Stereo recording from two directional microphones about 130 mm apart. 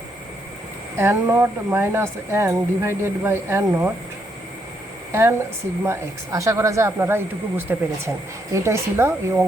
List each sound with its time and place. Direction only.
0.9 s speech: 20° right (ahead or behind)
5.8 s speech: 20° right (ahead or behind)